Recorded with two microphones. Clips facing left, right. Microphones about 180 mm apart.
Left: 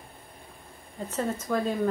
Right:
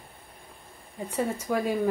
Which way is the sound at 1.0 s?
10° right (ahead or behind).